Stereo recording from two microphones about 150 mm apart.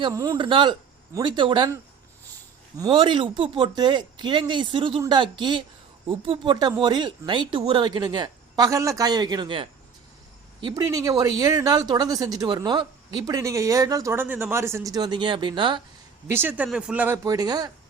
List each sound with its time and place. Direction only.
0.1 s speech: 25° right (ahead or behind)
2.7 s speech: 30° right (ahead or behind)
16.2 s speech: 15° right (ahead or behind)
17.2 s speech: 25° right (ahead or behind)